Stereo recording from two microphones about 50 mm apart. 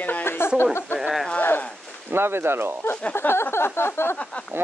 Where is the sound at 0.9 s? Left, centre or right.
Centre.